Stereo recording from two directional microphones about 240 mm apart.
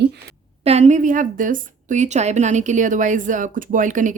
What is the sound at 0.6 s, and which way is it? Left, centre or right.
A woman's voice, right.